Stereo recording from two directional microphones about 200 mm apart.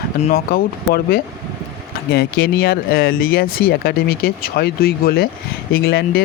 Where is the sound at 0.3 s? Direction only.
50° left (ahead or behind).